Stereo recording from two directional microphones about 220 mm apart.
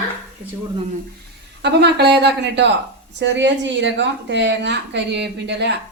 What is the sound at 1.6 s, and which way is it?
A woman's voice, 50° right (ahead or behind).